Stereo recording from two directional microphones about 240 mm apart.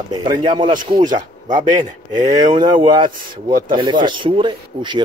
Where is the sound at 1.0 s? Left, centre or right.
Right.